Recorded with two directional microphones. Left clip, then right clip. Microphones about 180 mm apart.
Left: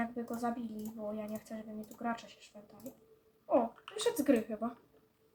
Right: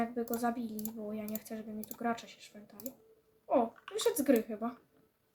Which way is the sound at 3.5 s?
25° right (ahead or behind).